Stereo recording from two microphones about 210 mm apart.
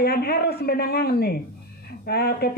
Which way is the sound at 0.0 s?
50° left (ahead or behind).